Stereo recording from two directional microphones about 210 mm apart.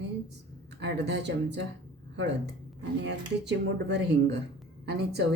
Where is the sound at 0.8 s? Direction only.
55° right (ahead or behind).